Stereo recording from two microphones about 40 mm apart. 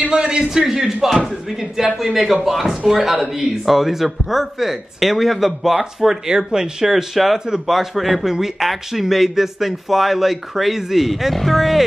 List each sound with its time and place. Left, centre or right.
0.1 s a man's voice: centre
7.3 s speech: centre
7.6 s a man's voice: centre